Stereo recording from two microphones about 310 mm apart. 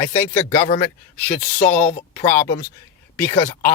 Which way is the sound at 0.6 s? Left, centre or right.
Left.